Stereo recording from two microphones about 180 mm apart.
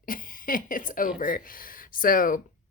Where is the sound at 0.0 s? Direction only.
50° left (ahead or behind).